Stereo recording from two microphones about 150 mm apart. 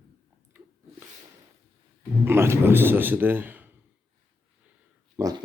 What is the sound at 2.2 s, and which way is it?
Speech, 15° right (ahead or behind).